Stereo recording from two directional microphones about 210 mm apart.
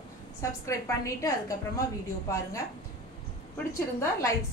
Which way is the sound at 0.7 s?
15° left (ahead or behind).